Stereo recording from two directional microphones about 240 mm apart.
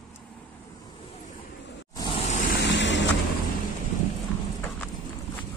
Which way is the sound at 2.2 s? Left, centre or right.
Left.